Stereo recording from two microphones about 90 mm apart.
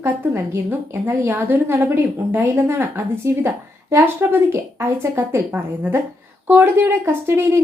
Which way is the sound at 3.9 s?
25° right (ahead or behind).